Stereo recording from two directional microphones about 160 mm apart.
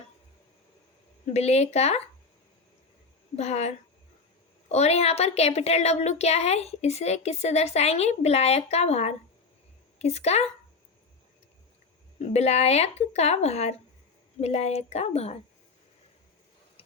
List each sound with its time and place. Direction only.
1.3 s a woman's voice: 40° left (ahead or behind)
3.3 s a woman's voice: 45° left (ahead or behind)
12.2 s a woman's voice: 45° left (ahead or behind)